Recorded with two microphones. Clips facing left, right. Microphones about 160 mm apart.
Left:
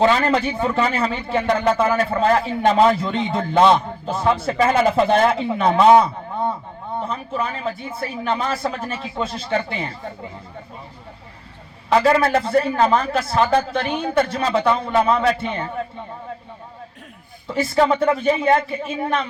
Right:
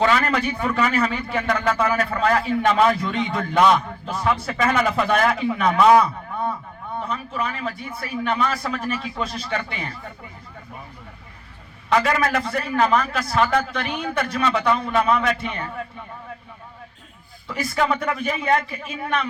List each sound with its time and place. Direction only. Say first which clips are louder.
0.0 s a man's voice: left 3 dB; 30° left (ahead or behind)
11.9 s a man's voice: left 4 dB; 30° left (ahead or behind)
17.5 s a man's voice: left 5 dB; 25° left (ahead or behind)